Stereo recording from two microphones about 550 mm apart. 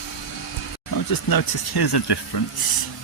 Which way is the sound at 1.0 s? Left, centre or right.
Left.